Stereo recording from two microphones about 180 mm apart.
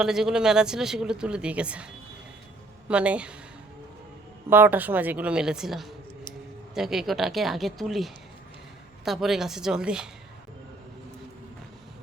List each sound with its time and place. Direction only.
0.0 s speech: 5° right (ahead or behind)
2.9 s a woman's voice: 5° right (ahead or behind)
4.4 s a woman's voice: 10° right (ahead or behind)